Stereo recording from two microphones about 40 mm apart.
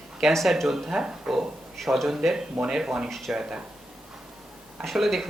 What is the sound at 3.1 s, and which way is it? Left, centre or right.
Speech, centre.